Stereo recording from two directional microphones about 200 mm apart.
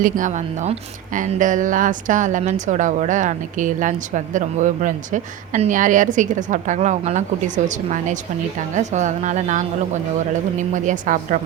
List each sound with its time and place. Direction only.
0.0 s a woman's voice: 40° right (ahead or behind)